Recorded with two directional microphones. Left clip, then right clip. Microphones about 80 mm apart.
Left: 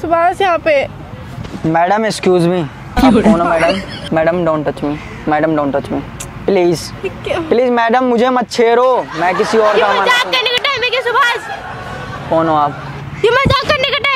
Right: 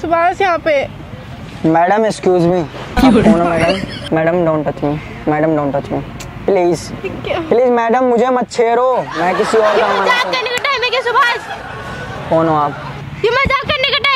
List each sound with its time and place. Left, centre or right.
0.3 s speech: centre
1.7 s speech: centre
2.2 s speech: centre
4.1 s speech: left
6.4 s speech: centre
7.5 s speech: centre
10.7 s a sound: centre
12.3 s speech: centre
13.2 s a sound: centre
13.5 s a sound: left